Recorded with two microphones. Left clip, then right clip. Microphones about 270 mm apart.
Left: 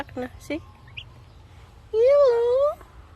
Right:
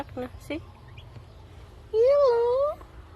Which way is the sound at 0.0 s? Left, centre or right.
Centre.